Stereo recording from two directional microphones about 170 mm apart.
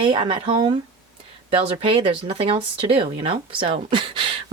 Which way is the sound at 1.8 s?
35° right (ahead or behind).